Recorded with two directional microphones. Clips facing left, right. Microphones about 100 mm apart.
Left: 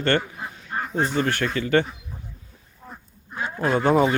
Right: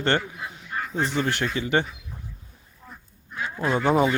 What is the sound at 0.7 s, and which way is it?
Goose, 35° left (ahead or behind).